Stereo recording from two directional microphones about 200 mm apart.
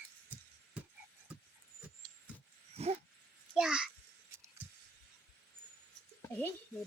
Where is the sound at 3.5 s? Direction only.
5° right (ahead or behind).